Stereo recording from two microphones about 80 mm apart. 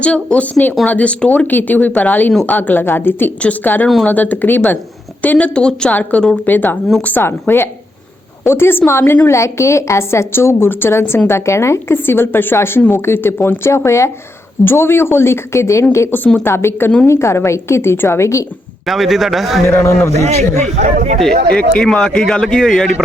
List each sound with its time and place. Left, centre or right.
0.0 s a man's voice: centre; by 16.0 s left
16.1 s a woman's voice: left
18.9 s a man's voice: centre
19.6 s a woman's voice: left
21.2 s a man's voice: centre